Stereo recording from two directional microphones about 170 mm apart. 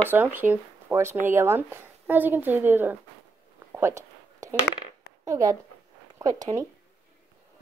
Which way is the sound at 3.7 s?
15° right (ahead or behind).